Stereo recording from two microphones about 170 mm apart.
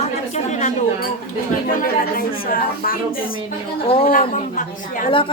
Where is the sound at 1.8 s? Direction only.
55° left (ahead or behind).